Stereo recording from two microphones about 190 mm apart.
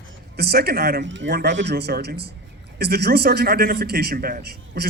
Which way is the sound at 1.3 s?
65° right (ahead or behind).